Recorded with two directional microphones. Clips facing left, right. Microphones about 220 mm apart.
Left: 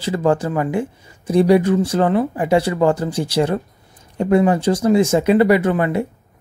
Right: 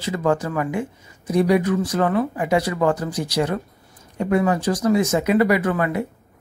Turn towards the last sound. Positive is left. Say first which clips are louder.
# left 4 dB
turn(degrees=25)  # may be behind; listen again after turning